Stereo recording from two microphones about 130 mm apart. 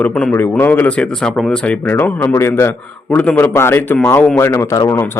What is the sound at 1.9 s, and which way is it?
Speech, 15° left (ahead or behind).